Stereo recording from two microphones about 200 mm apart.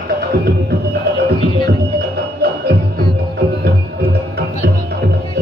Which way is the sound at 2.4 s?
55° right (ahead or behind).